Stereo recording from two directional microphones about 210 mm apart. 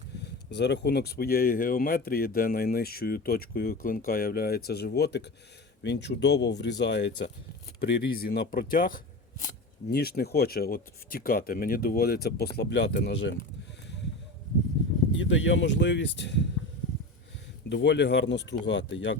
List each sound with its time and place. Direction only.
0.2 s speech: 55° left (ahead or behind)
15.1 s speech: 60° left (ahead or behind)
17.7 s speech: 55° left (ahead or behind)